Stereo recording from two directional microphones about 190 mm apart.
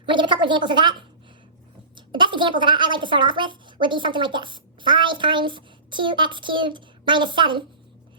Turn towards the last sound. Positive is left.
turn(degrees=-25)  # may be behind; listen again after turning